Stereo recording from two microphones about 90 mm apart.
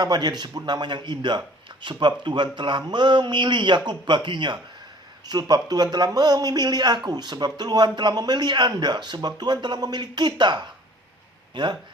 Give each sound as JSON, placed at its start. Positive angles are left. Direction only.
{"t": 0.0, "sound": "speech", "side_deg": -50}
{"t": 5.2, "sound": "speech", "side_deg": -50}